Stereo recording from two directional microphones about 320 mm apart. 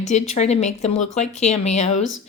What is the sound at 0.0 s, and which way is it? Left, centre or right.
Speech, left.